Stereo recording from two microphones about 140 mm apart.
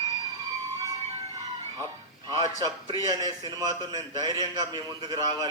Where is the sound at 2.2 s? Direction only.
30° right (ahead or behind).